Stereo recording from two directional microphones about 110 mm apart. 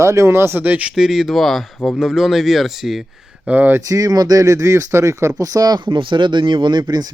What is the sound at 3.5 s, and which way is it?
Speech, 15° right (ahead or behind).